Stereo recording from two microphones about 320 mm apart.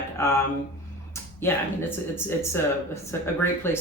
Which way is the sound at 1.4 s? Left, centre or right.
Centre.